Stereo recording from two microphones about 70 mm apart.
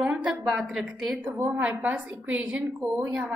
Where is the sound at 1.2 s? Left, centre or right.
Right.